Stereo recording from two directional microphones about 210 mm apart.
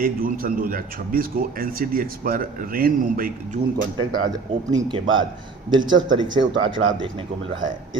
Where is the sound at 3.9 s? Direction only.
20° right (ahead or behind).